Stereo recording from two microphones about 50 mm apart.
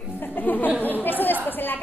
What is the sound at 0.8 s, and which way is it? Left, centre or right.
Chatter, left.